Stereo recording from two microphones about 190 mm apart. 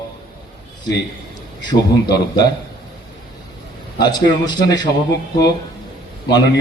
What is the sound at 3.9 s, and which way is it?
Speech, 20° left (ahead or behind).